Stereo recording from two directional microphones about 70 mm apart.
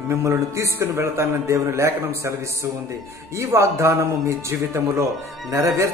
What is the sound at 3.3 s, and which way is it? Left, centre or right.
A man's voice, right.